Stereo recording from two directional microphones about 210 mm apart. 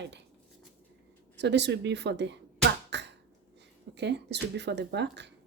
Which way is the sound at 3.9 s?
55° right (ahead or behind).